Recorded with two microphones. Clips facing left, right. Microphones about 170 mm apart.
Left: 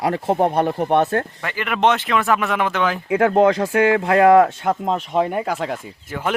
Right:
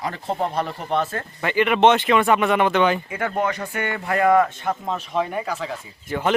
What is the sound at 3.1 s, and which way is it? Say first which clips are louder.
Speech: left 9 dB; 80° left.